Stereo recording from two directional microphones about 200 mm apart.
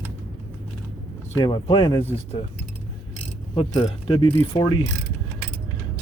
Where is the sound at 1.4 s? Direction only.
25° left (ahead or behind).